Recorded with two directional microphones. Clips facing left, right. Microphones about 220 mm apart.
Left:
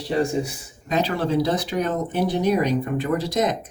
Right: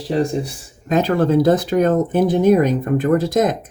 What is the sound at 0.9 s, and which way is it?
Speech, 50° right (ahead or behind).